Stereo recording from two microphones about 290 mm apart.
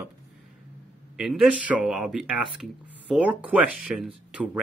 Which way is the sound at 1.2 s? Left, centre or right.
Centre.